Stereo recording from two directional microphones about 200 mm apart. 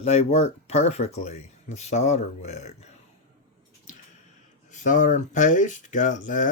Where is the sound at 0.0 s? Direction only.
30° left (ahead or behind).